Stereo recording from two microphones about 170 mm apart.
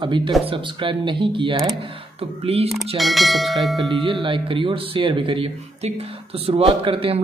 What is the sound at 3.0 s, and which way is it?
Speech, centre (ahead or behind).